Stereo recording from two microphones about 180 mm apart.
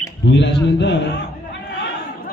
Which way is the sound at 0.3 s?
75° left (ahead or behind).